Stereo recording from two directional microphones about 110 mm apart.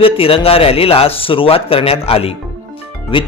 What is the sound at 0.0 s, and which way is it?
Speech, 55° left (ahead or behind).